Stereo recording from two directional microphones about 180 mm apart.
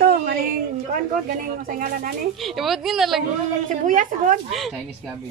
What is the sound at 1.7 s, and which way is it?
Speech, 50° right (ahead or behind).